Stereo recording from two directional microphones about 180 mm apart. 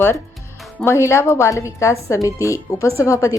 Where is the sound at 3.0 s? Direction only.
15° left (ahead or behind).